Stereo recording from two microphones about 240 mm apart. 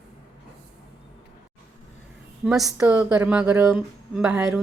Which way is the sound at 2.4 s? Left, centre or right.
Centre.